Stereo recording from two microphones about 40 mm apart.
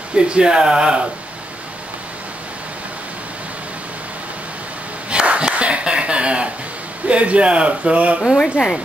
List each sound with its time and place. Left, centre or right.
0.1 s a man's voice: right
5.1 s a sound: right
7.1 s a man's voice: right
8.4 s speech: centre